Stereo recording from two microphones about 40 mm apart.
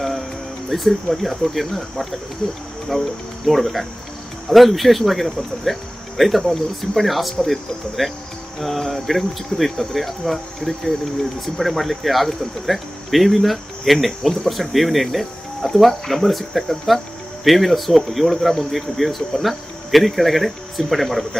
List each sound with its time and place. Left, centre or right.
0.0 s insect: centre
0.7 s speech: centre